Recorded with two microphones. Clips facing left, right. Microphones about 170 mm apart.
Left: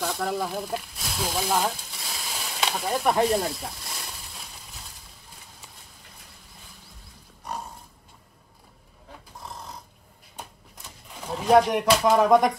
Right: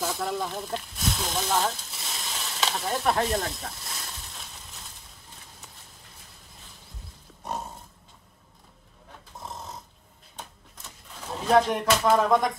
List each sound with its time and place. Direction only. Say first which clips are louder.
0.0 s speech: left 2 dB; centre (ahead or behind)
1.9 s a sound: left 1 dB; centre (ahead or behind)
2.8 s speech: left 4 dB; 10° left (ahead or behind)
9.3 s dog: right 2 dB; 20° right (ahead or behind)
11.2 s speech: left 3 dB; 10° left (ahead or behind)